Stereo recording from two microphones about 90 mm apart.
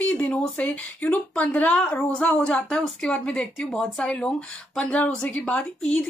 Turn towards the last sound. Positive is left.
turn(degrees=10)  # may be behind; listen again after turning